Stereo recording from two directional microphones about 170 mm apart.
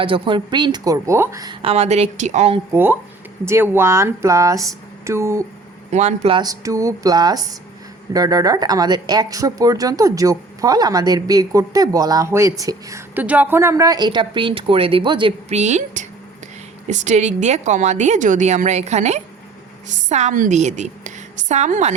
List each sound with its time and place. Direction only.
0.0 s speech: 30° right (ahead or behind)
1.6 s a woman's voice: 40° right (ahead or behind)
2.7 s speech: 10° right (ahead or behind)
5.9 s a woman's voice: 40° right (ahead or behind)
6.3 s speech: 20° right (ahead or behind)
15.4 s a woman's voice: 40° right (ahead or behind)